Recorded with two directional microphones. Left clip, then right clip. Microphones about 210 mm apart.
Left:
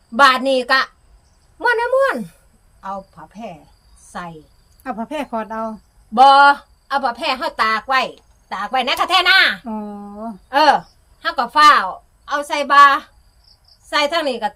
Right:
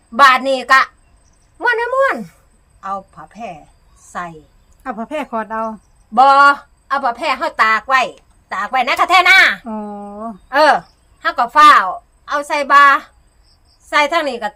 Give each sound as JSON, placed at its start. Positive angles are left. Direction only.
{"t": 0.2, "sound": "a woman's voice", "side_deg": -5}
{"t": 4.8, "sound": "speech", "side_deg": -15}
{"t": 6.1, "sound": "a woman's voice", "side_deg": -5}